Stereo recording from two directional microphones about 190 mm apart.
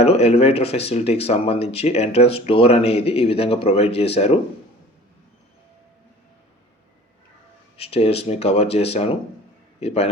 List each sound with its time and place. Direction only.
0.0 s speech: 35° left (ahead or behind)
7.8 s speech: 30° left (ahead or behind)